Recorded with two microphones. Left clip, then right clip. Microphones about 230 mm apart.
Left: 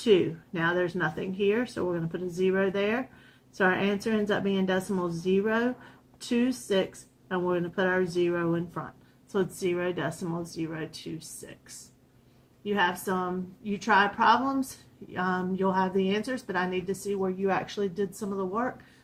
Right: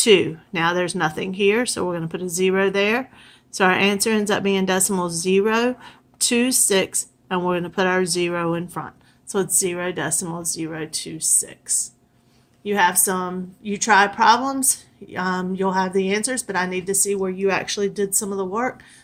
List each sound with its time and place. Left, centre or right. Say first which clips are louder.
0.0 s a woman's voice: right 8 dB; right
12.6 s a woman's voice: right 8 dB; right